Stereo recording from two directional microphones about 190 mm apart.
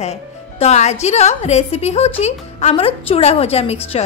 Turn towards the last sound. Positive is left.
turn(degrees=30)  # may be behind; listen again after turning